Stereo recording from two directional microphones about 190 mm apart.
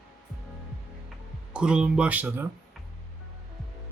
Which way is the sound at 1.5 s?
5° right (ahead or behind).